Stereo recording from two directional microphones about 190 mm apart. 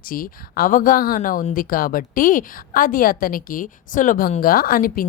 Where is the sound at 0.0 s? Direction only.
50° left (ahead or behind).